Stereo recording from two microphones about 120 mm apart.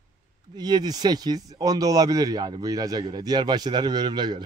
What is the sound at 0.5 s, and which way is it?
Speech, 35° right (ahead or behind).